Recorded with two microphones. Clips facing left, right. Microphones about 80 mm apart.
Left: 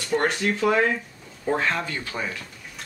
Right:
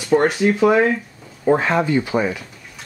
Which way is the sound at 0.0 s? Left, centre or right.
Centre.